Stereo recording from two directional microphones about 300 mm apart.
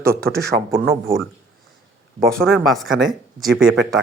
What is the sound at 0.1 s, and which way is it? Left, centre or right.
Speech, right.